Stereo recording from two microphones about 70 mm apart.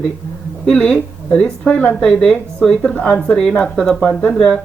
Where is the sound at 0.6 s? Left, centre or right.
Centre.